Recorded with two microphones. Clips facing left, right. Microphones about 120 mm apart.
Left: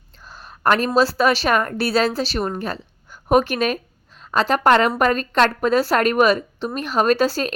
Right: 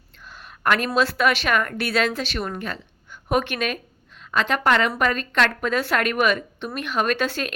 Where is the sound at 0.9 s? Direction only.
35° left (ahead or behind).